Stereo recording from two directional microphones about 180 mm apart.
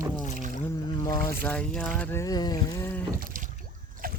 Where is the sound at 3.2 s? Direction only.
50° right (ahead or behind).